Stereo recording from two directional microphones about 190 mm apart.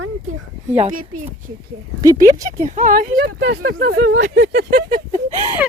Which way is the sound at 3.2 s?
70° right (ahead or behind).